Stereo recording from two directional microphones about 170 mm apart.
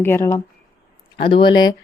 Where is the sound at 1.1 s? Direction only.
30° left (ahead or behind).